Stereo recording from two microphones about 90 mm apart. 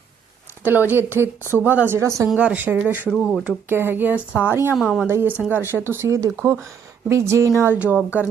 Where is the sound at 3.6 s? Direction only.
25° right (ahead or behind).